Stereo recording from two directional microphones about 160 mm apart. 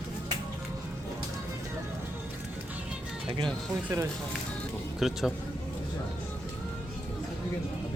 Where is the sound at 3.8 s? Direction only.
15° right (ahead or behind).